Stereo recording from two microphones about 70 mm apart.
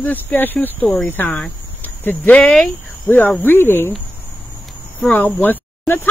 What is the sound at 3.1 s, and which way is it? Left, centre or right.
Speech, left.